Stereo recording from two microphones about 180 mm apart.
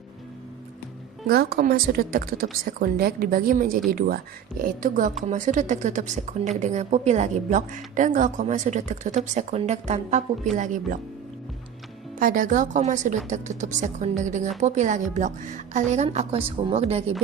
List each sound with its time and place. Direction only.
1.3 s a woman's voice: 60° right (ahead or behind); by 11.0 s 45° right (ahead or behind)
12.2 s a woman's voice: 50° right (ahead or behind); by 17.0 s 30° right (ahead or behind)